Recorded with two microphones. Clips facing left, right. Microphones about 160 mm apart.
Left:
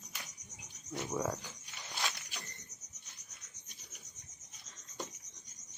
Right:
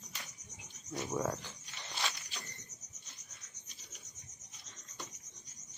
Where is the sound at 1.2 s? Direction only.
5° left (ahead or behind).